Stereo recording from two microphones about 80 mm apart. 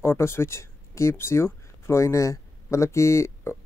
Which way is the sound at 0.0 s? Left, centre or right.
Left.